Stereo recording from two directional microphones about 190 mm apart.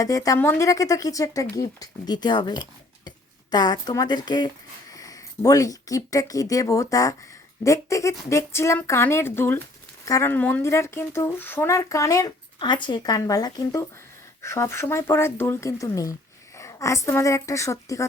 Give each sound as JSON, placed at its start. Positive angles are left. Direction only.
{"t": 0.0, "sound": "a woman's voice", "side_deg": 20}